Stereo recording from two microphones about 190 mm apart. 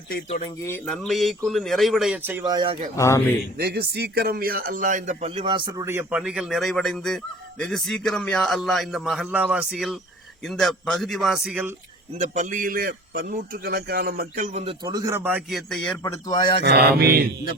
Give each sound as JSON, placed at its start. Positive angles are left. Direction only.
{"t": 0.3, "sound": "speech", "side_deg": 35}
{"t": 0.6, "sound": "a man's voice", "side_deg": 10}
{"t": 2.9, "sound": "a man's voice", "side_deg": 15}
{"t": 3.6, "sound": "a man's voice", "side_deg": -55}
{"t": 12.2, "sound": "a man's voice", "side_deg": -40}
{"t": 16.0, "sound": "speech", "side_deg": 20}
{"t": 16.6, "sound": "mantra", "side_deg": -55}